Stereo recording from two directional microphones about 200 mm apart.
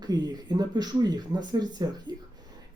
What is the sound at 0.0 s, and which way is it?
Speech, 20° right (ahead or behind).